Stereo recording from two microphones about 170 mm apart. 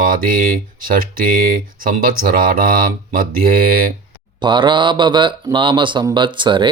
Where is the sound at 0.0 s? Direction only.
55° right (ahead or behind).